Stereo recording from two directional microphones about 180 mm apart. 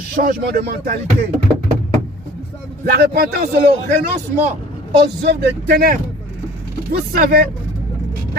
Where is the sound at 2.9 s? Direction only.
65° right (ahead or behind).